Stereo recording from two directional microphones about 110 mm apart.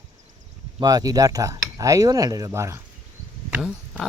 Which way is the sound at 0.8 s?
35° right (ahead or behind).